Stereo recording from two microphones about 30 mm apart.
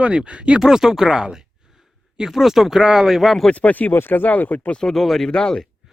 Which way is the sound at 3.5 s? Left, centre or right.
Left.